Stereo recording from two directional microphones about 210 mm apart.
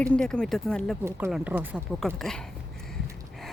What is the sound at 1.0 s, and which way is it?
Speech, 10° right (ahead or behind).